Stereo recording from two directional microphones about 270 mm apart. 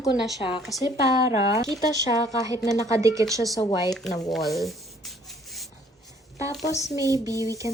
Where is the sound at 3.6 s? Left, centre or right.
Centre.